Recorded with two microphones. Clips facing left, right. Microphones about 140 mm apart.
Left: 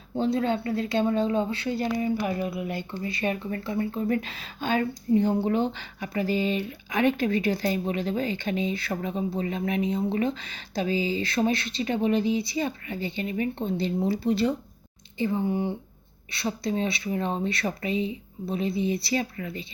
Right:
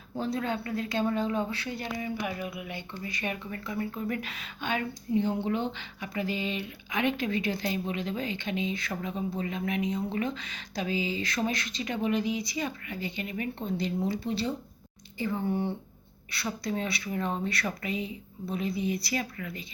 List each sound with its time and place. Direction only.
0.2 s speech: 30° left (ahead or behind)
15.2 s speech: 20° left (ahead or behind)